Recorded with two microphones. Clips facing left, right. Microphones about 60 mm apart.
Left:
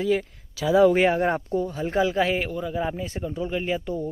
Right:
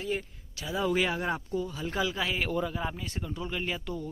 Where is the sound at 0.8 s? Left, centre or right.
Left.